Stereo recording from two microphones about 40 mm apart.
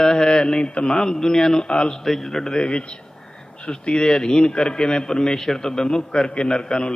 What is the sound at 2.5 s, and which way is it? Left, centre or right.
A man's voice, left.